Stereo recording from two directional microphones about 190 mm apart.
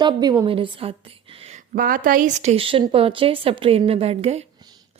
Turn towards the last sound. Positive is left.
turn(degrees=-35)  # may be behind; listen again after turning